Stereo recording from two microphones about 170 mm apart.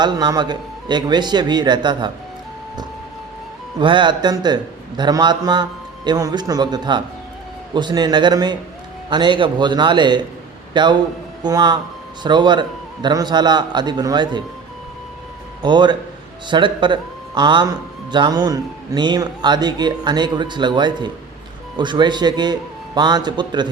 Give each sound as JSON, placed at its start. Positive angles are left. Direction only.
{"t": 0.0, "sound": "a man's voice", "side_deg": -25}
{"t": 3.8, "sound": "a man's voice", "side_deg": -30}
{"t": 15.6, "sound": "a man's voice", "side_deg": -25}